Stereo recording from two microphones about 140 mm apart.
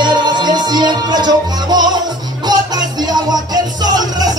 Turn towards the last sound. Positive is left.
turn(degrees=-30)  # may be behind; listen again after turning